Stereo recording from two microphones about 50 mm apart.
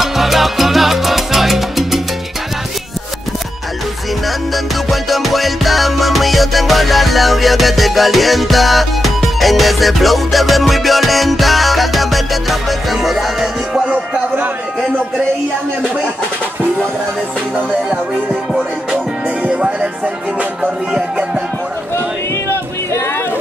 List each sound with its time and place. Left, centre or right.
0.0 s salsa music: centre
4.8 s music: centre
13.8 s music: right
17.6 s music: centre
19.4 s music: right
21.9 s a sound: left